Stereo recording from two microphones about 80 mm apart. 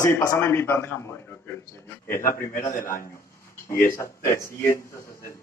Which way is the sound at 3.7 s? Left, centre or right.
Left.